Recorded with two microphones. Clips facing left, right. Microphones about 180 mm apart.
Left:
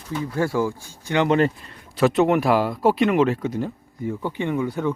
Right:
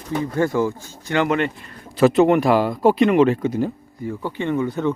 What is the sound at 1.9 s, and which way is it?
Speech, centre (ahead or behind).